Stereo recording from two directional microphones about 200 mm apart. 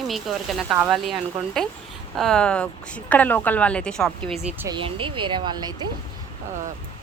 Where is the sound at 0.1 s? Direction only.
Centre (ahead or behind).